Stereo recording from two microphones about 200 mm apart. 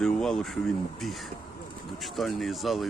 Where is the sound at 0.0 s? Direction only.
Centre (ahead or behind).